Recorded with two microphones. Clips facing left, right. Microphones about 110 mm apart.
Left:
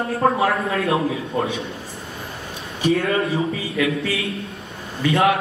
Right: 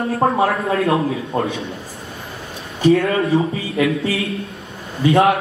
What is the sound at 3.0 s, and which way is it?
A man's voice, 30° right (ahead or behind).